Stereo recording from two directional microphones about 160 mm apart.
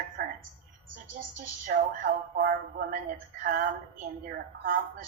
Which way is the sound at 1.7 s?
70° right (ahead or behind).